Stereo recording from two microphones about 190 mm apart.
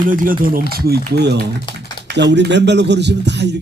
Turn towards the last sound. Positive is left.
turn(degrees=-65)  # may be behind; listen again after turning